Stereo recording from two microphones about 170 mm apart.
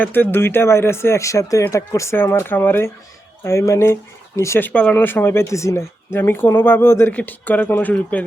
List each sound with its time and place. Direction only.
0.0 s speech: 10° left (ahead or behind)